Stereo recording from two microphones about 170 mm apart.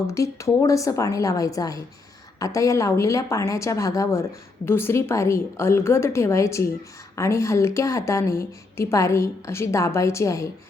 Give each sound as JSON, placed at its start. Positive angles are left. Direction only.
{"t": 0.1, "sound": "a woman's voice", "side_deg": 20}